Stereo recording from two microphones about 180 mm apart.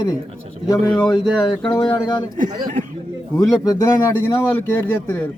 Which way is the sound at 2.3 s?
50° right (ahead or behind).